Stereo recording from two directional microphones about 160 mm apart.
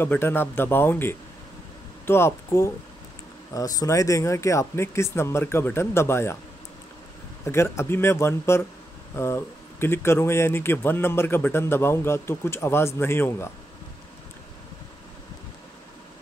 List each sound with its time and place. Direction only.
0.0 s speech: 15° left (ahead or behind)
7.4 s speech: 15° left (ahead or behind)